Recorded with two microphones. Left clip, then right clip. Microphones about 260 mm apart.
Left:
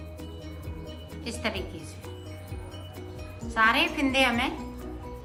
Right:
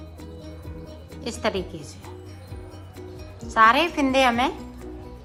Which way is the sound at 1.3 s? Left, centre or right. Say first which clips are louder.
Right 6 dB; centre.